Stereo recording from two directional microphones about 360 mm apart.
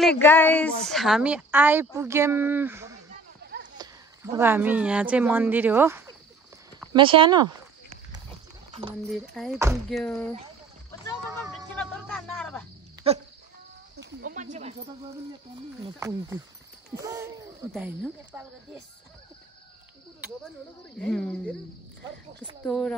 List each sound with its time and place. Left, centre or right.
0.2 s speech: centre
6.9 s walk: centre
9.1 s speech: centre
11.7 s a sound: centre
13.0 s speech: centre
13.9 s snake: right
16.0 s speech: centre
21.0 s speech: centre
22.7 s speech: centre